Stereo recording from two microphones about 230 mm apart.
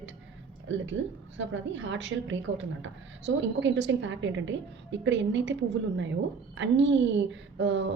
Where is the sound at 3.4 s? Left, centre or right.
Right.